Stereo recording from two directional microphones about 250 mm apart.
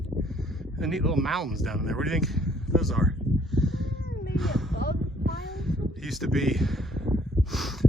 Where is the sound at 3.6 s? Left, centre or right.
Centre.